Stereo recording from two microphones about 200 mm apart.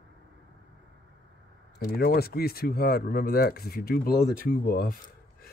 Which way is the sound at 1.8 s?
50° left (ahead or behind).